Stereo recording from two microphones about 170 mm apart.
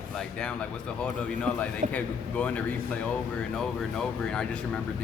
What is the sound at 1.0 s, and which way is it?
A man's voice, 5° left (ahead or behind).